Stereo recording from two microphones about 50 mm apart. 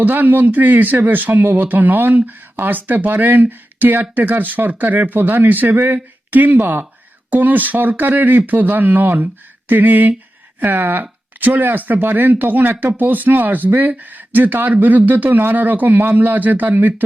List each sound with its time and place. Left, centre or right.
0.0 s speech: right